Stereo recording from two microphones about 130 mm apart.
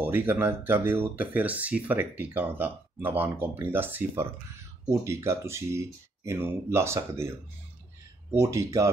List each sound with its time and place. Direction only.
0.0 s speech: 15° right (ahead or behind)
8.4 s speech: 25° right (ahead or behind)